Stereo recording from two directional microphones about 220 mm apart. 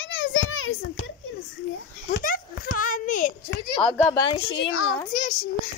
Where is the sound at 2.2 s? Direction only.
40° left (ahead or behind).